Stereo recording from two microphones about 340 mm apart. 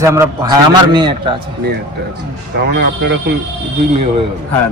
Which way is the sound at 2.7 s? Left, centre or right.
Right.